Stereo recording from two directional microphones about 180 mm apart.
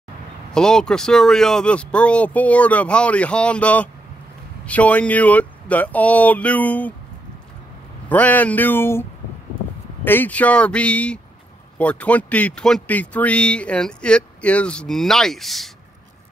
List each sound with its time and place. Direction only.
0.5 s speech: 5° left (ahead or behind)
8.1 s speech: 10° left (ahead or behind)
10.0 s speech: 10° left (ahead or behind)